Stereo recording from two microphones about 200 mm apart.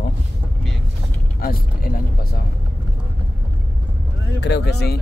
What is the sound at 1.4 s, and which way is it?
Speech, 45° left (ahead or behind).